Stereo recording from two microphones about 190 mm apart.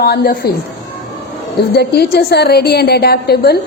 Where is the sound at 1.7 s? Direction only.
55° left (ahead or behind).